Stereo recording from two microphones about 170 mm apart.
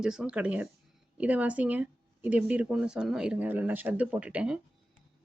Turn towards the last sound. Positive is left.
turn(degrees=-5)  # may be behind; listen again after turning